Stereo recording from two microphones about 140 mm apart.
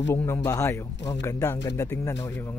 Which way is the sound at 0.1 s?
20° left (ahead or behind).